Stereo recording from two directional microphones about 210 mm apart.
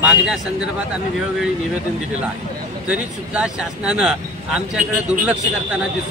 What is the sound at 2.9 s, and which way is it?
A man's voice, 5° right (ahead or behind).